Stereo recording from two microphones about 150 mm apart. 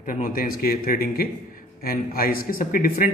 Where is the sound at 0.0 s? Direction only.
70° left (ahead or behind).